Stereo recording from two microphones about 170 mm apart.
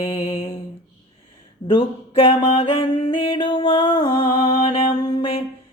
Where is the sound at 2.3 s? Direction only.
40° left (ahead or behind).